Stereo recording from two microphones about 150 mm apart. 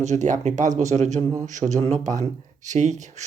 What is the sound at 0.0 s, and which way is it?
Speech, 55° right (ahead or behind).